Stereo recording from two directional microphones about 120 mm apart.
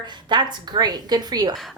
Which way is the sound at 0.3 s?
40° right (ahead or behind).